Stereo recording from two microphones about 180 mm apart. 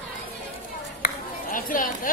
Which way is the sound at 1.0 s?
50° left (ahead or behind).